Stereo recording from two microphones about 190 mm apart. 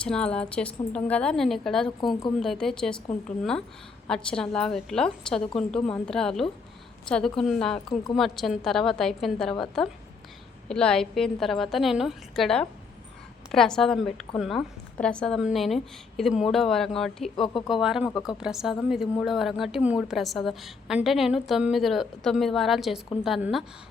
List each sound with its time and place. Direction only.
0.0 s a woman's voice: 5° left (ahead or behind)
17.3 s speech: 25° left (ahead or behind)
17.7 s a woman's voice: centre (ahead or behind)